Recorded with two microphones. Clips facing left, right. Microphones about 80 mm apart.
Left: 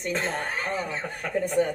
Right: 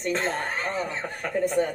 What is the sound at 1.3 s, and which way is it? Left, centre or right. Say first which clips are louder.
Speech: right 2 dB; right.